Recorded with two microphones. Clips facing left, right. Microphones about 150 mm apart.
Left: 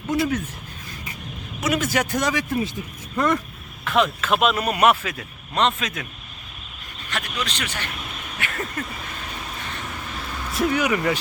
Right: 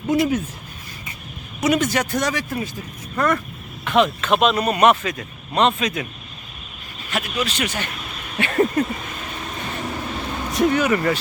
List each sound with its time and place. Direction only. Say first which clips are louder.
0.1 s speech: right 4 dB; 10° right (ahead or behind)
1.6 s speech: right 3 dB; 5° left (ahead or behind)
3.8 s speech: right 3 dB; centre (ahead or behind)
7.1 s speech: right 5 dB; 10° right (ahead or behind)
8.4 s a sound: right 12 dB; 25° right (ahead or behind)
10.5 s speech: right 3 dB; 5° left (ahead or behind)